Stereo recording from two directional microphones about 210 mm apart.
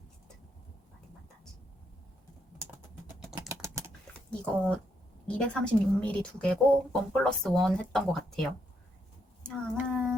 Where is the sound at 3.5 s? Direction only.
15° right (ahead or behind).